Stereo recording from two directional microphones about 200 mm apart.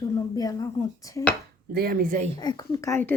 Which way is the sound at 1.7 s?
50° right (ahead or behind).